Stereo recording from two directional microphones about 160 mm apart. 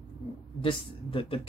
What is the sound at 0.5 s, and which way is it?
Speech, 35° left (ahead or behind).